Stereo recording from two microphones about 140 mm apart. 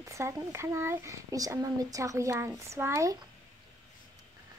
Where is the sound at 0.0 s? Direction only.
20° right (ahead or behind).